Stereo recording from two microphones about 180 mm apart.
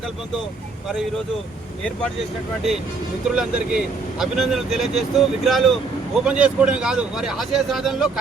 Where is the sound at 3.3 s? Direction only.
5° right (ahead or behind).